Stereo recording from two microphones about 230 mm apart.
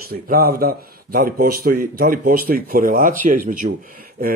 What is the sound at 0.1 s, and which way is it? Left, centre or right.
Speech, right.